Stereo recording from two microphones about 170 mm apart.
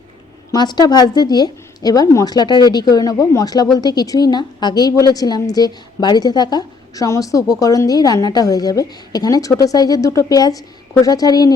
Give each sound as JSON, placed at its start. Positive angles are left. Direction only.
{"t": 0.5, "sound": "speech", "side_deg": 25}